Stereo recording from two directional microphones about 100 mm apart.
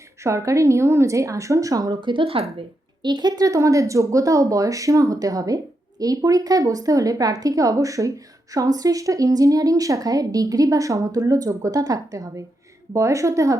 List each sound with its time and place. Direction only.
0.2 s speech: 30° right (ahead or behind)
2.0 s speech: 55° right (ahead or behind)
3.0 s speech: 45° right (ahead or behind)